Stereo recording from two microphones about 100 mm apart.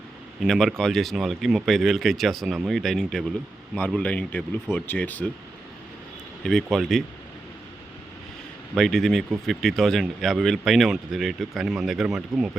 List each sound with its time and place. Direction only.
0.4 s speech: 5° left (ahead or behind)
6.4 s speech: 5° left (ahead or behind)
8.7 s speech: 5° left (ahead or behind)